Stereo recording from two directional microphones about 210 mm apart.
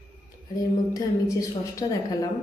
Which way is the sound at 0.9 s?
15° left (ahead or behind).